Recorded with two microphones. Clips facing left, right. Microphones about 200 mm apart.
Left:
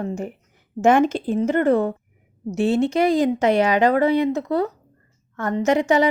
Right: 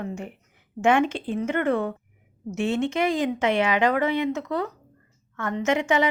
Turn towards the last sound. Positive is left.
turn(degrees=35)  # may be behind; listen again after turning